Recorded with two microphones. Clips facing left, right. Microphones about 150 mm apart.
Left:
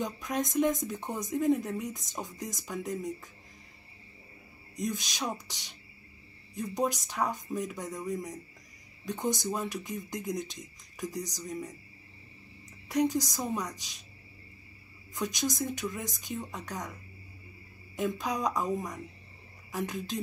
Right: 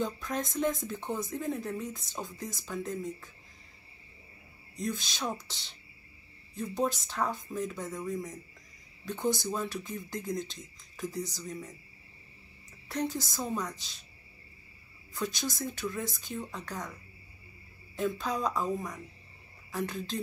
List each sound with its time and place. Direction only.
0.0 s speech: 15° left (ahead or behind)
4.7 s speech: 15° left (ahead or behind)
12.8 s speech: 15° left (ahead or behind)
15.1 s speech: 15° left (ahead or behind)
17.9 s speech: 15° left (ahead or behind)